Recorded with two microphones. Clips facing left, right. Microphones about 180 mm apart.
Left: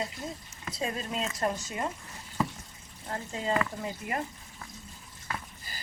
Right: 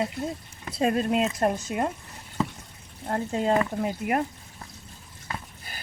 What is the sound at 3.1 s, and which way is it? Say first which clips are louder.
A woman's voice: right 7 dB; 60° right (ahead or behind).